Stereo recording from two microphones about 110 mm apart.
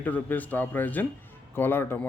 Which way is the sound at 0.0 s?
15° left (ahead or behind).